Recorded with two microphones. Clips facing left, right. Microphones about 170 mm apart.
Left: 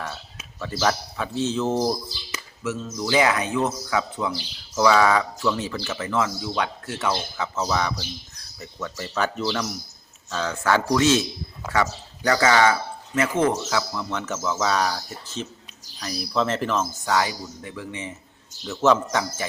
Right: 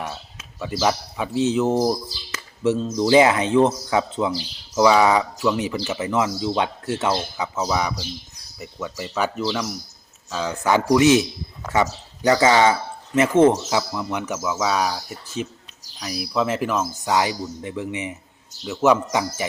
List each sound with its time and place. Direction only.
0.6 s speech: 15° right (ahead or behind)
2.6 s speech: 30° right (ahead or behind); by 19.5 s 15° right (ahead or behind)